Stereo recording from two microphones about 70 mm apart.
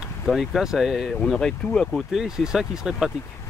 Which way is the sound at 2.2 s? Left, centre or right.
Centre.